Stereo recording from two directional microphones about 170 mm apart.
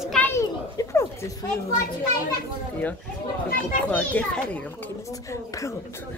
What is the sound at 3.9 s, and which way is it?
Speech, 10° left (ahead or behind).